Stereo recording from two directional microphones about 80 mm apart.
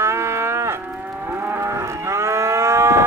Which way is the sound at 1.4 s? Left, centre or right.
Right.